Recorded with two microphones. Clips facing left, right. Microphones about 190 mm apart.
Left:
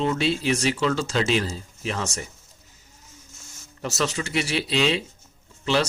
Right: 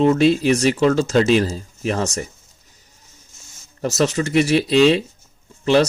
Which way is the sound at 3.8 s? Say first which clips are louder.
Right 8 dB; 40° right (ahead or behind).